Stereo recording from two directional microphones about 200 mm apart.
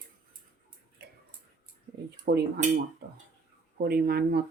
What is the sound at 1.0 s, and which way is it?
Tick-tock, 55° right (ahead or behind).